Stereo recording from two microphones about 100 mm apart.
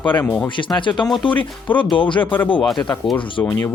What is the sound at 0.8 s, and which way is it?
Speech, 55° left (ahead or behind).